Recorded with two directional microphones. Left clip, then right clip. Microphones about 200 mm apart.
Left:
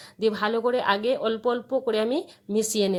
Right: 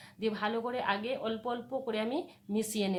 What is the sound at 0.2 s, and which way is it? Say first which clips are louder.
Speech: left 9 dB; 35° left (ahead or behind).